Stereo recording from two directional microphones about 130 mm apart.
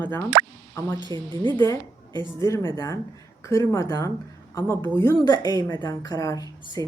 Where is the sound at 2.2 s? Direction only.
20° left (ahead or behind).